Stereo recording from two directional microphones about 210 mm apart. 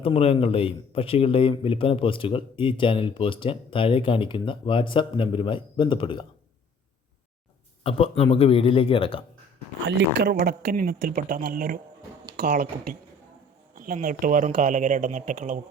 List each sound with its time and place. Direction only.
0.0 s speech: 25° left (ahead or behind)
7.9 s speech: 25° left (ahead or behind)
9.8 s speech: 55° right (ahead or behind)